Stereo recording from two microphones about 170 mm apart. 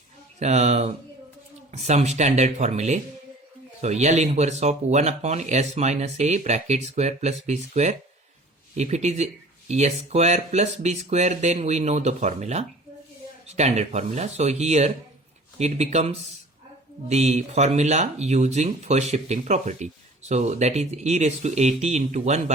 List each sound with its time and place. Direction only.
0.3 s speech: 40° right (ahead or behind)